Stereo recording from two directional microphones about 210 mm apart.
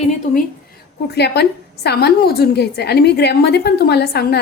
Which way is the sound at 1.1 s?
50° left (ahead or behind).